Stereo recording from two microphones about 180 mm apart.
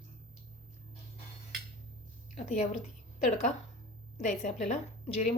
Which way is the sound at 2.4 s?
35° left (ahead or behind).